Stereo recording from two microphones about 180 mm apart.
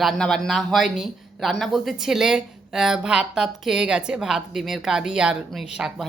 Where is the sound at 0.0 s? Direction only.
Centre (ahead or behind).